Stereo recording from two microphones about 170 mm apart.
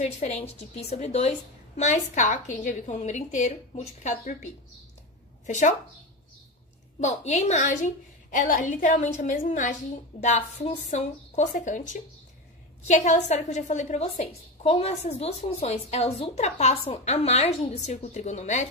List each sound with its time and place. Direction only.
0.0 s a woman's voice: 40° left (ahead or behind)
7.0 s a woman's voice: 40° left (ahead or behind)